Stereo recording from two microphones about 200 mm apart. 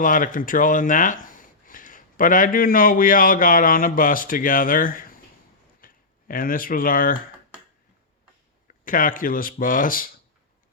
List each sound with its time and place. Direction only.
0.0 s speech: 40° left (ahead or behind)
8.8 s speech: 45° left (ahead or behind)